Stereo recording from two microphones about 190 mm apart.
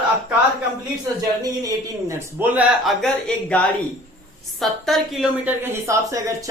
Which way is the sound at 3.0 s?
5° left (ahead or behind).